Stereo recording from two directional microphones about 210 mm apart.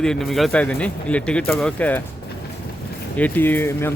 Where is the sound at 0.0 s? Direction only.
Centre (ahead or behind).